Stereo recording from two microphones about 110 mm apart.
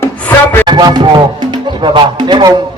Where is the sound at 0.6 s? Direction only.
40° right (ahead or behind).